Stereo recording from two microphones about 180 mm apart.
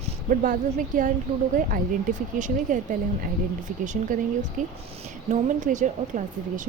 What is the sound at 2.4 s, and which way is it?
Speech, 45° right (ahead or behind).